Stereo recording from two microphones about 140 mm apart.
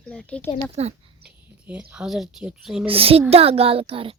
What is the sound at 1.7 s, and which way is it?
Speech, 10° right (ahead or behind).